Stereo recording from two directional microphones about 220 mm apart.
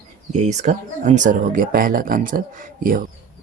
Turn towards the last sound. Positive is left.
turn(degrees=-40)  # may be behind; listen again after turning